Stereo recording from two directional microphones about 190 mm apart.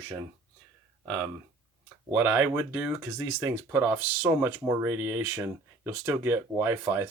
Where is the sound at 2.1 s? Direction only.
10° right (ahead or behind).